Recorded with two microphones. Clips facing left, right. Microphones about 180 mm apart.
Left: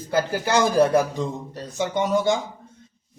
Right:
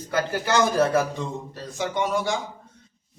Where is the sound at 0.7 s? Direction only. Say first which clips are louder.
Left 6 dB; 15° left (ahead or behind).